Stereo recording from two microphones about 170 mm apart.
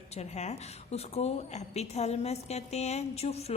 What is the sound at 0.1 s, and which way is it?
A woman's voice, 40° left (ahead or behind).